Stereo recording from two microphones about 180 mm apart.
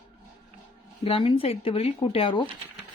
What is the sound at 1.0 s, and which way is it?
Speech, 30° left (ahead or behind).